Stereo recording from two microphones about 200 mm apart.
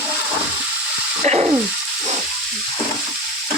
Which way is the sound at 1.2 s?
35° right (ahead or behind).